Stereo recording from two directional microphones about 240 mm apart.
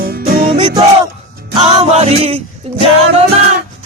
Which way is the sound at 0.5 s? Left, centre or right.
Centre.